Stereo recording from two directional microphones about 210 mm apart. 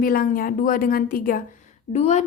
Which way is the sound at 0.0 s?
40° left (ahead or behind).